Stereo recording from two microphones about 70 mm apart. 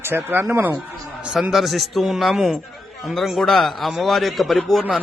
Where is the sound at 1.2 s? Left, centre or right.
Centre.